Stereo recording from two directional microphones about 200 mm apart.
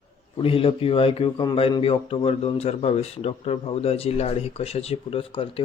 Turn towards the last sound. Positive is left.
turn(degrees=25)  # may be behind; listen again after turning